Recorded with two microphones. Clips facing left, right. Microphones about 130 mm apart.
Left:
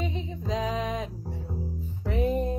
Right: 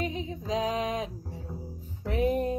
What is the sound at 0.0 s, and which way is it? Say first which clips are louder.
Music: even; centre (ahead or behind).